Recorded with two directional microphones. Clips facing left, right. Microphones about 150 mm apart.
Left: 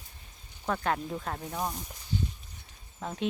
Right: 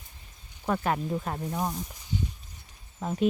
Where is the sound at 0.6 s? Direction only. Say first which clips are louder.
Right 2 dB; 5° right (ahead or behind).